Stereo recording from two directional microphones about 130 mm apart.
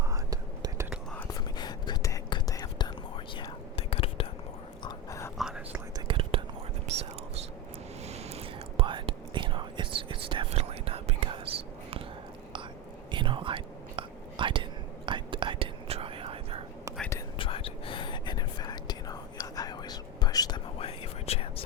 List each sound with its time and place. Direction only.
0.0 s whispering: 25° right (ahead or behind)
1.3 s whispering: 35° left (ahead or behind)
3.8 s whispering: 45° left (ahead or behind)
4.8 s a sound: 35° left (ahead or behind)
5.4 s whispering: 5° right (ahead or behind)
6.1 s whispering: 45° right (ahead or behind)
6.9 s whispering: 55° right (ahead or behind)
13.1 s whispering: 40° right (ahead or behind)
17.3 s whispering: 40° left (ahead or behind)
20.7 s whispering: 45° left (ahead or behind)